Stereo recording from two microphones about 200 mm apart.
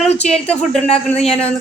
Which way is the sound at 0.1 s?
30° left (ahead or behind).